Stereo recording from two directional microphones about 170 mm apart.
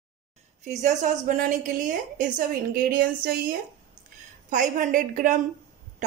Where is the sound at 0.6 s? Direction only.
45° right (ahead or behind); by 3.6 s 60° right (ahead or behind).